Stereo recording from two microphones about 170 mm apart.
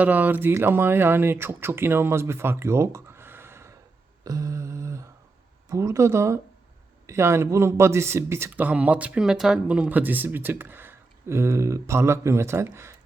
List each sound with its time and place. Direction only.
0.0 s speech: 10° right (ahead or behind)
4.2 s a sound: 20° right (ahead or behind)
5.6 s speech: 20° right (ahead or behind)